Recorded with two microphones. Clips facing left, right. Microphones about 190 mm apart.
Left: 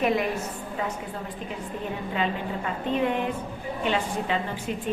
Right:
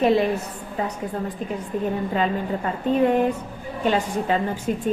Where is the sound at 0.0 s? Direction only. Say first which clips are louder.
Right 6 dB; 30° right (ahead or behind).